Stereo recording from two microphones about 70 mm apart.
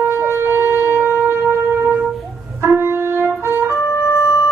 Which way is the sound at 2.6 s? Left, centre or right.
Right.